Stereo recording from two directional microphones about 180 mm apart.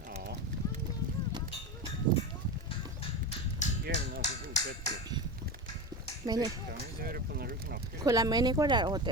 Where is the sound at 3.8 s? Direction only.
55° right (ahead or behind).